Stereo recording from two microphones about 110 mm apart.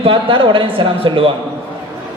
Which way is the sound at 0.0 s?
55° right (ahead or behind).